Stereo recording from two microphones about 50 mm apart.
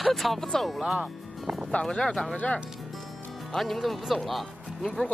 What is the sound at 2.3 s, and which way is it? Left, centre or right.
Speech, left.